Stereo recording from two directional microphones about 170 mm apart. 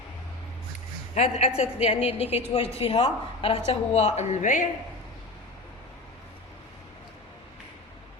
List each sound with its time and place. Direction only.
1.1 s a woman's voice: 40° left (ahead or behind)